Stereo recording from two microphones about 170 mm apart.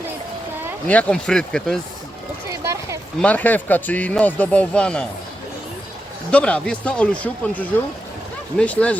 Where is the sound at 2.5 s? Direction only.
20° right (ahead or behind).